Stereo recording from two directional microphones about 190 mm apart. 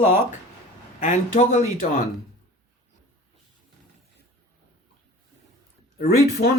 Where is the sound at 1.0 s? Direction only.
35° left (ahead or behind).